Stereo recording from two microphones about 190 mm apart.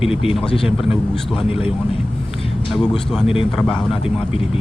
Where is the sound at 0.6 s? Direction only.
Centre (ahead or behind).